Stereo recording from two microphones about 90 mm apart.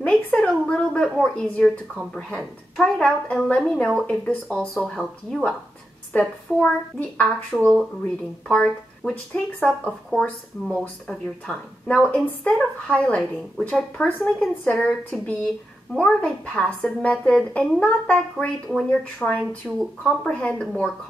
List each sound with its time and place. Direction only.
0.0 s a woman's voice: 15° left (ahead or behind)
8.5 s speech: 10° left (ahead or behind)
20.3 s speech: 15° left (ahead or behind)